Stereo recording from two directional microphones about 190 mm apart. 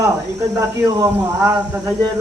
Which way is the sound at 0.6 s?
15° right (ahead or behind).